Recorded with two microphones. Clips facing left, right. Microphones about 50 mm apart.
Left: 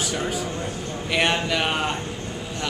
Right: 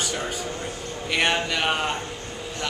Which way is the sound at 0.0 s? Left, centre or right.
Centre.